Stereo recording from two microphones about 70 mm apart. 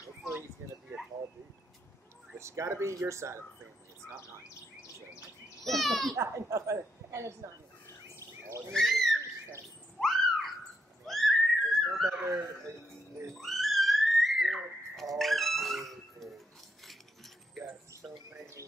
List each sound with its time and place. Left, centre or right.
2.3 s speech: right
5.6 s speech: centre
6.1 s a woman's voice: right
8.2 s a sound: right
8.7 s speech: centre
9.9 s a sound: centre
13.3 s music: centre
15.1 s speech: centre
16.8 s coin: centre
18.3 s bird: right